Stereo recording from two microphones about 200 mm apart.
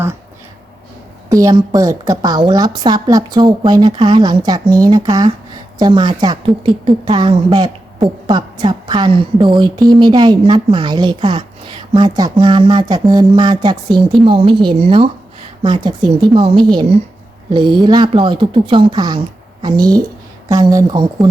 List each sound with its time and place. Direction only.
1.3 s a woman's voice: 15° right (ahead or behind)